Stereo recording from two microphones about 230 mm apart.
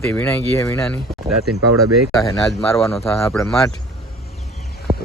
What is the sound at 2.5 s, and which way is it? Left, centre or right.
Speech, centre.